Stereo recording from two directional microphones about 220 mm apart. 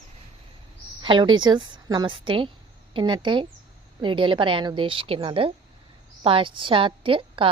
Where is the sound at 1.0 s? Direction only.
20° right (ahead or behind).